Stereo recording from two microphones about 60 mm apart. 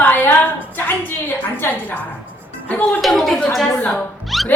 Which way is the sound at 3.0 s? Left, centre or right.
Centre.